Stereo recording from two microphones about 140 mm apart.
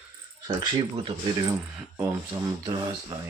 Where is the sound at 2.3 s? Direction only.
35° right (ahead or behind).